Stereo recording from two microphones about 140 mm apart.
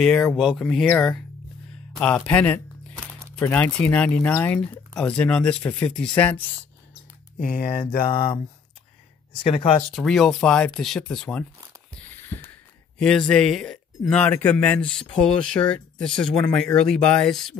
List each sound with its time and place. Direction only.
0.4 s speech: centre (ahead or behind)
7.3 s speech: 75° left (ahead or behind)
8.0 s speech: 35° left (ahead or behind)
9.4 s speech: 40° left (ahead or behind)
9.9 s speech: centre (ahead or behind)
11.9 s mechanisms: 15° left (ahead or behind)
13.0 s speech: 5° left (ahead or behind)